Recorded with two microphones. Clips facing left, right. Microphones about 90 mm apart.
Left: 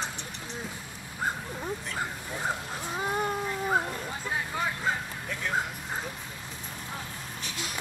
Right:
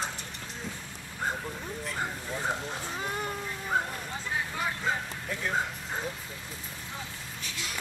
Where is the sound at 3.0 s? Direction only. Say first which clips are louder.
Left 7 dB; 25° left (ahead or behind).